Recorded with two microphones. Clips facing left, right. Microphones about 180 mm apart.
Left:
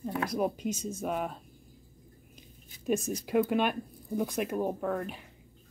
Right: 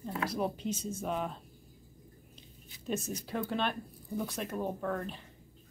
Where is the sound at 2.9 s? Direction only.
45° left (ahead or behind).